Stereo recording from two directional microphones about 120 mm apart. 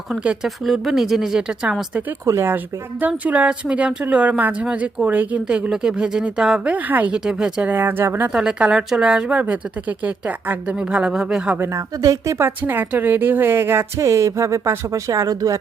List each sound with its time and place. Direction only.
0.1 s speech: 5° right (ahead or behind)
2.2 s a woman's voice: 20° right (ahead or behind)
8.3 s a woman's voice: 5° right (ahead or behind)
11.6 s a woman's voice: 25° right (ahead or behind)